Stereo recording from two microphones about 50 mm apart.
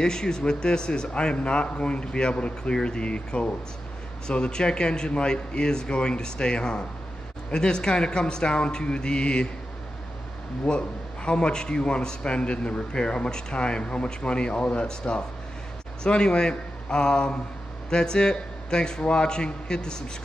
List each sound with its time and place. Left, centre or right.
0.0 s speech: centre
10.6 s a man's voice: left